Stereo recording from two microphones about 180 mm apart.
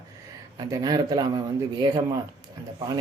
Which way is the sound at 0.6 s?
20° right (ahead or behind).